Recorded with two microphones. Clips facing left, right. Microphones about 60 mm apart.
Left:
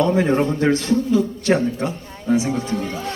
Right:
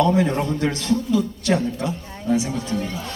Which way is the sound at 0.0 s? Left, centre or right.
Left.